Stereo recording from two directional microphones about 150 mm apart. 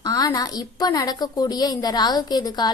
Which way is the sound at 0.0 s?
25° left (ahead or behind).